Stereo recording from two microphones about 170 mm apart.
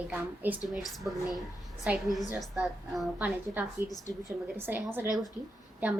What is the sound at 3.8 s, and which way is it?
A woman's voice, 10° right (ahead or behind).